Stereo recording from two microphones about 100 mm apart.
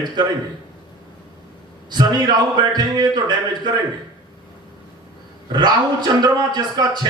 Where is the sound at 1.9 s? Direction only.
45° right (ahead or behind).